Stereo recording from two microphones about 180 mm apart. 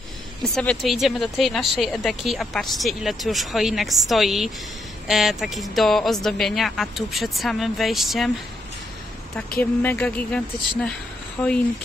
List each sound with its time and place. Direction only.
0.4 s speech: 5° left (ahead or behind)
9.6 s speech: 10° left (ahead or behind)